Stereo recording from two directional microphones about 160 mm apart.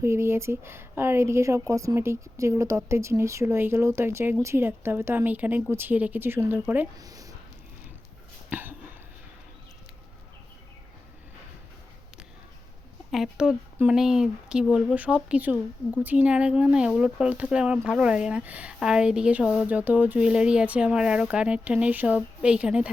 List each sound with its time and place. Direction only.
0.0 s speech: 15° right (ahead or behind)
6.9 s speech: 20° right (ahead or behind)
8.4 s a sound: 10° right (ahead or behind)
13.1 s speech: centre (ahead or behind)